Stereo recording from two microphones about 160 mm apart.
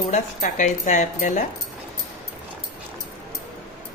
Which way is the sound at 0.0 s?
50° left (ahead or behind).